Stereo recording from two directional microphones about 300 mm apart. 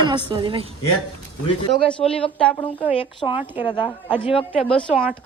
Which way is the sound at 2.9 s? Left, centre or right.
Centre.